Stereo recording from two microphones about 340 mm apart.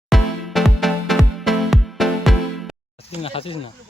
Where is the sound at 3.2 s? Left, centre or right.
Centre.